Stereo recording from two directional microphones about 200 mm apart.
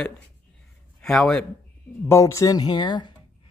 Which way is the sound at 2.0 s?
15° left (ahead or behind).